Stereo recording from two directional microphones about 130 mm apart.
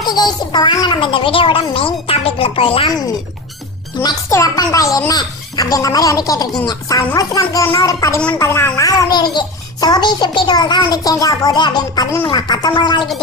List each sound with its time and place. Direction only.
0.0 s speech: 30° left (ahead or behind)
4.0 s a woman's voice: 25° left (ahead or behind)